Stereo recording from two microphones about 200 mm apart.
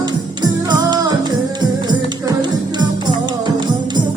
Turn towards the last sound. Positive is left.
turn(degrees=-20)  # may be behind; listen again after turning